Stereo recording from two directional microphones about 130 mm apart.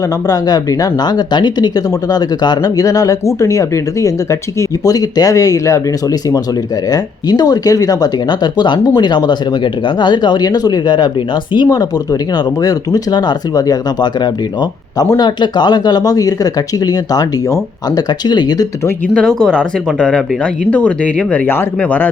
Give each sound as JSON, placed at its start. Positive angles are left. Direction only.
{"t": 0.3, "sound": "speech", "side_deg": 30}
{"t": 6.9, "sound": "speech", "side_deg": 30}
{"t": 19.1, "sound": "speech", "side_deg": 5}